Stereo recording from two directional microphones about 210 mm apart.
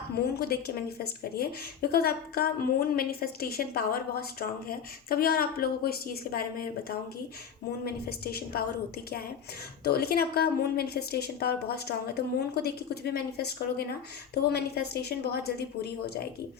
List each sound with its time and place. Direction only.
0.3 s a woman's voice: 50° left (ahead or behind)
9.8 s a woman's voice: 50° left (ahead or behind)